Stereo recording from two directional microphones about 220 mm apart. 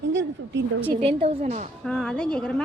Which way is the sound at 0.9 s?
25° right (ahead or behind).